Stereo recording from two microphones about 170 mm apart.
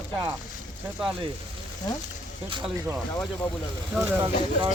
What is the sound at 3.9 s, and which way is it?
Speech, 10° right (ahead or behind).